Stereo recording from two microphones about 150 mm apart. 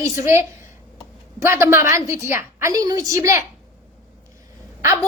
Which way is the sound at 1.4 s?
20° right (ahead or behind).